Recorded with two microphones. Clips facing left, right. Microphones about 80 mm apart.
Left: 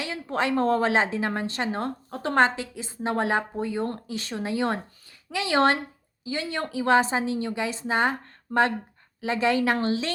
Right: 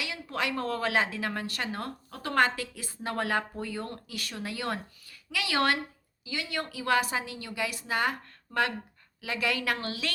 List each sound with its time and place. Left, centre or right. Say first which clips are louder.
0.0 s a woman's voice: left 6 dB; left